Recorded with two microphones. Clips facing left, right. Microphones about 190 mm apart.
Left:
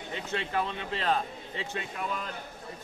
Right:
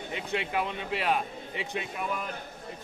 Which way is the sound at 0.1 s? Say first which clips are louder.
Right 1 dB; 15° right (ahead or behind).